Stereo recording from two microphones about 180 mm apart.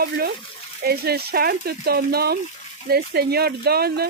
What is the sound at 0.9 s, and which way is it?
Speech, 60° right (ahead or behind).